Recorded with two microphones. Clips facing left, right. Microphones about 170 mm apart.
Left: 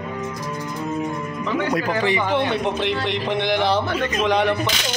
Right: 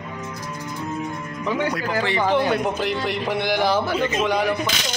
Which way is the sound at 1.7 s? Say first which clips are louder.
Left 3 dB; 20° left (ahead or behind).